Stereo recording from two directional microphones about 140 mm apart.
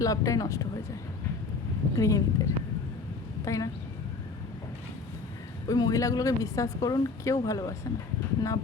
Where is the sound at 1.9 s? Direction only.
25° left (ahead or behind).